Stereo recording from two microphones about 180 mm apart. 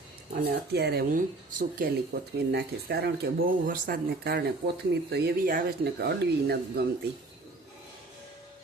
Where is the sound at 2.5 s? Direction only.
65° right (ahead or behind).